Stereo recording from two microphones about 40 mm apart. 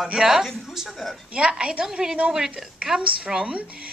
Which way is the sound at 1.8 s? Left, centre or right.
Centre.